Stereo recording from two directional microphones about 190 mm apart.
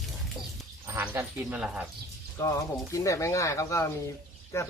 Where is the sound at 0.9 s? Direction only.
15° right (ahead or behind).